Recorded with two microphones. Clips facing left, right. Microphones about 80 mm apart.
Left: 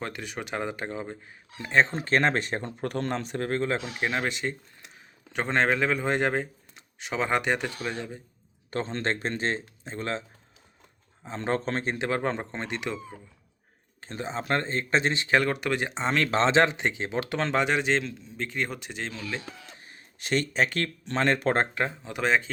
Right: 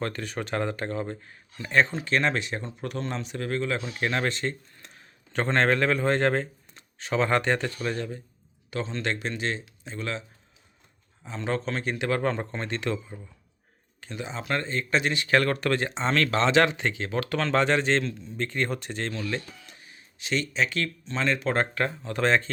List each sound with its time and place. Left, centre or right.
0.0 s speech: centre
1.9 s speech: left
3.8 s speech: centre
8.7 s speech: left
11.3 s speech: left; by 13.0 s centre
14.0 s speech: left
17.6 s a man's voice: centre
19.8 s speech: left
21.8 s speech: centre